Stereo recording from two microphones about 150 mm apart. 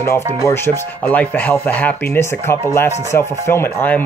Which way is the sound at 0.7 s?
10° left (ahead or behind).